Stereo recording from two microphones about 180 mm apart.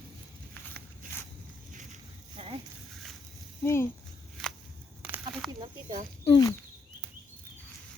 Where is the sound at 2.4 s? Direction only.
30° right (ahead or behind).